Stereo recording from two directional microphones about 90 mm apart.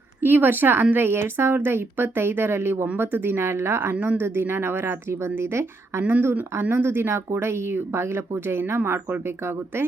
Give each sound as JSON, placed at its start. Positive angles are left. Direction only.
{"t": 0.2, "sound": "a woman's voice", "side_deg": -25}
{"t": 3.9, "sound": "a woman's voice", "side_deg": -15}
{"t": 4.2, "sound": "a woman's voice", "side_deg": -25}
{"t": 6.0, "sound": "a woman's voice", "side_deg": -15}